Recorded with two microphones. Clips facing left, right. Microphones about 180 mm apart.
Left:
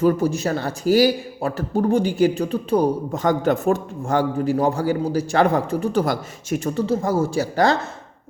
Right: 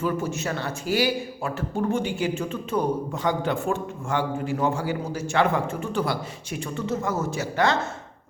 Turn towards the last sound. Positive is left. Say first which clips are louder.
# left 5 dB
turn(degrees=35)  # may be behind; listen again after turning